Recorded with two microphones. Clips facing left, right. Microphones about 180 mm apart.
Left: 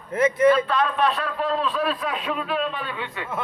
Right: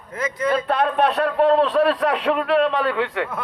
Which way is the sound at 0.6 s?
60° right (ahead or behind).